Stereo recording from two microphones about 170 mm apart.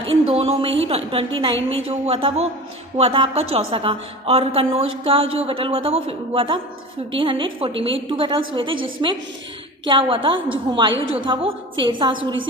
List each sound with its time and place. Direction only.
0.0 s a woman's voice: 35° right (ahead or behind)